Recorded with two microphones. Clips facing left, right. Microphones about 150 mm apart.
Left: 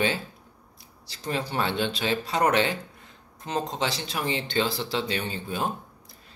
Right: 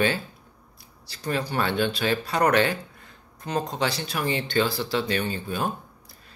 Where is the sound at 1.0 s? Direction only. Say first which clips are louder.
Right 2 dB; 20° left (ahead or behind).